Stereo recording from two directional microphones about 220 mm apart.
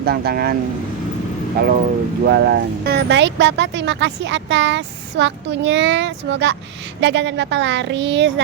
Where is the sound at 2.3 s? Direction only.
45° right (ahead or behind).